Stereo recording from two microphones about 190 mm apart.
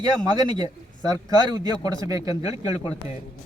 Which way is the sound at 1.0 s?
20° right (ahead or behind).